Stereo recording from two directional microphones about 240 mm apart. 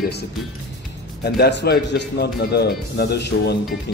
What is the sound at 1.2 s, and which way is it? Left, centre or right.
Speech, left.